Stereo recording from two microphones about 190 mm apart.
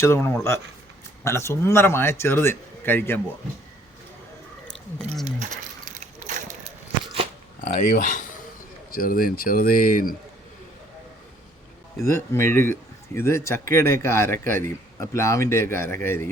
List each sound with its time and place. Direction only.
0.0 s a man's voice: 15° left (ahead or behind)
5.2 s a sound: 40° right (ahead or behind)
7.6 s a man's voice: 45° left (ahead or behind)
12.0 s a man's voice: 15° left (ahead or behind)